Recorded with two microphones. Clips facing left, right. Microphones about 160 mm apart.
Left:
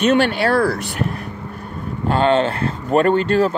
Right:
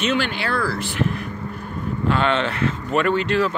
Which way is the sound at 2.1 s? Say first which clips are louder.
Left 5 dB; 40° left (ahead or behind).